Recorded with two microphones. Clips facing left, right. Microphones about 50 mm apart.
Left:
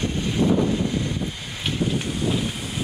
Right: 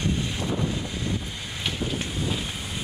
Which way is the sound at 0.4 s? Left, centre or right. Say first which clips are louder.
Left 8 dB; centre.